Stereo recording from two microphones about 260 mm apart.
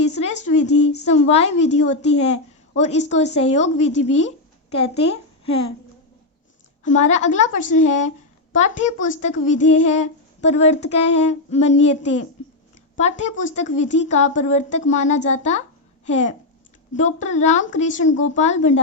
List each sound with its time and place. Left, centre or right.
0.0 s a sound: left
1.0 s a woman's voice: left
6.8 s speech: left